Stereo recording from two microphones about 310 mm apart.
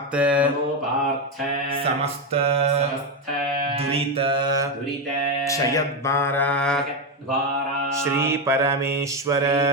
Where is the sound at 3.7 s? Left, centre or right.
Centre.